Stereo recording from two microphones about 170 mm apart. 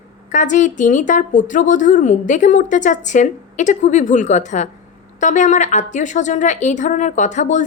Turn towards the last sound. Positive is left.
turn(degrees=45)  # may be behind; listen again after turning